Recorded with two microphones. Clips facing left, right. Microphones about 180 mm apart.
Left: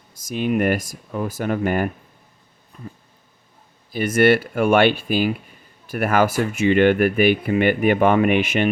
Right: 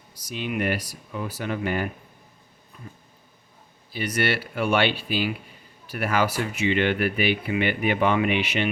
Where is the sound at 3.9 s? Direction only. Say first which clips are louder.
Left 10 dB; 50° left (ahead or behind).